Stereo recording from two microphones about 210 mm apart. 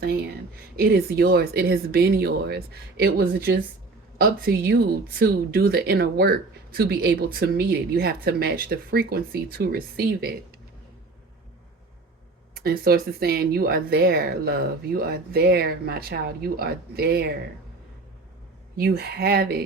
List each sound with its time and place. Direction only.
0.0 s speech: 50° right (ahead or behind)
12.5 s speech: 45° right (ahead or behind)
18.8 s speech: 50° right (ahead or behind)